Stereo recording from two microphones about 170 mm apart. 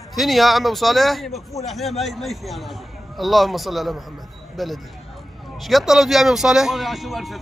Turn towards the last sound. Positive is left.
turn(degrees=0)  # may be behind; listen again after turning